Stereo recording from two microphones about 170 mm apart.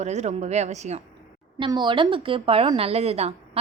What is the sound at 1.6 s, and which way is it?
A woman's voice, 25° right (ahead or behind).